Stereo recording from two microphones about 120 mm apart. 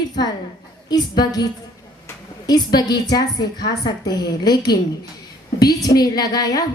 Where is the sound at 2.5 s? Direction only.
35° left (ahead or behind).